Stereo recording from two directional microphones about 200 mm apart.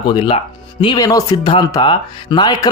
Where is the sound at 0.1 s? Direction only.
25° left (ahead or behind).